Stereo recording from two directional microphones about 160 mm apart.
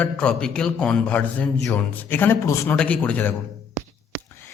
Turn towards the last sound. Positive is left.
turn(degrees=10)  # may be behind; listen again after turning